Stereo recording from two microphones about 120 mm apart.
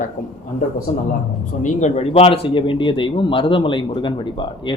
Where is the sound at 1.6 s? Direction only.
80° left.